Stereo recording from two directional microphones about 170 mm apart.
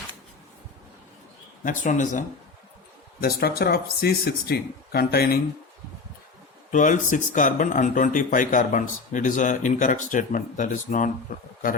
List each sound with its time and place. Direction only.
1.6 s speech: 50° left (ahead or behind)
3.2 s speech: 65° left (ahead or behind)
6.7 s speech: 50° left (ahead or behind)